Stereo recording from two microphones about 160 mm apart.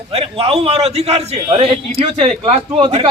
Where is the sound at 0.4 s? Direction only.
40° right (ahead or behind).